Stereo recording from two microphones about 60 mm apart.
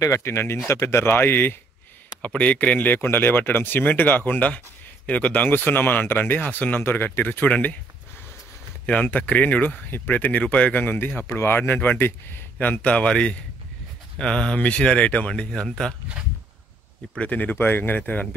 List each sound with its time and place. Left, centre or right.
0.0 s speech: left
2.2 s speech: left
8.8 s speech: left
17.2 s speech: left